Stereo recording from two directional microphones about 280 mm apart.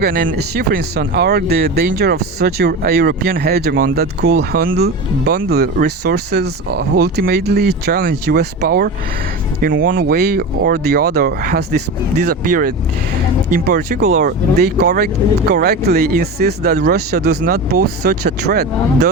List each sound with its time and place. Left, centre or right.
0.0 s speech: right